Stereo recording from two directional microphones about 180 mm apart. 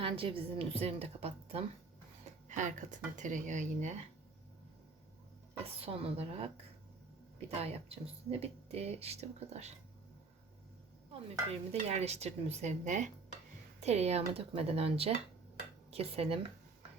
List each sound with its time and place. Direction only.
0.0 s speech: 30° right (ahead or behind)
5.8 s speech: 30° right (ahead or behind)
11.3 s speech: 35° right (ahead or behind)